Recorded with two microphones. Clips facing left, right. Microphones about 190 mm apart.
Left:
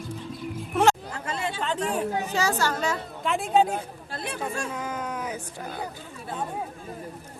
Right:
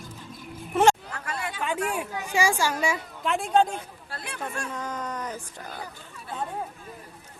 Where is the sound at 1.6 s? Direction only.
10° right (ahead or behind).